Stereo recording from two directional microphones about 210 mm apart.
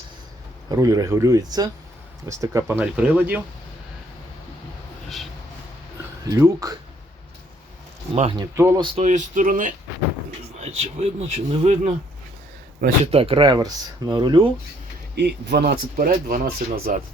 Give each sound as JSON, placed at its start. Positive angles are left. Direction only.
{"t": 0.7, "sound": "speech", "side_deg": -15}
{"t": 5.0, "sound": "a sound", "side_deg": 0}
{"t": 6.2, "sound": "speech", "side_deg": -15}
{"t": 8.1, "sound": "speech", "side_deg": -30}
{"t": 8.4, "sound": "speech", "side_deg": -15}
{"t": 8.8, "sound": "speech", "side_deg": -30}
{"t": 13.1, "sound": "speech", "side_deg": -25}
{"t": 15.1, "sound": "speech", "side_deg": -55}